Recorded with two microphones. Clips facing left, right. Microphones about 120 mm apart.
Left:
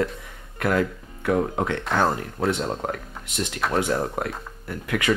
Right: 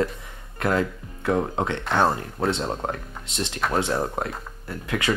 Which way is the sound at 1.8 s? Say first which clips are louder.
Right 2 dB; centre (ahead or behind).